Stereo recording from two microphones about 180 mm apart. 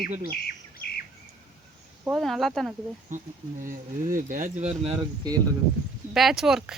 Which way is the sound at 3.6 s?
50° right (ahead or behind).